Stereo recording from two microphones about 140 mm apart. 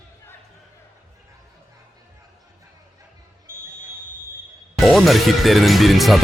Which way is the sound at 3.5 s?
20° right (ahead or behind).